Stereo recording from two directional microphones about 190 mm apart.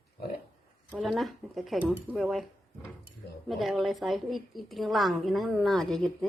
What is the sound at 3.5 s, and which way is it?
A woman's voice, centre (ahead or behind).